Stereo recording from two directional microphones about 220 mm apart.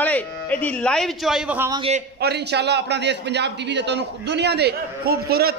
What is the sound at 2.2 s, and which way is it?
A man's voice, 50° right (ahead or behind).